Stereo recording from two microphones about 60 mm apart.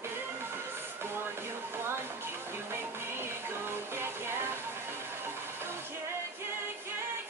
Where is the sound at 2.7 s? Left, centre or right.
Right.